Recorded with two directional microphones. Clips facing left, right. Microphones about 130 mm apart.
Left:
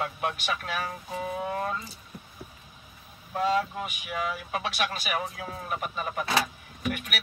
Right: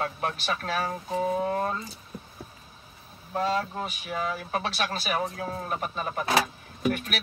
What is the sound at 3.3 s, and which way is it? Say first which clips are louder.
Speech: left 1 dB; 35° right (ahead or behind).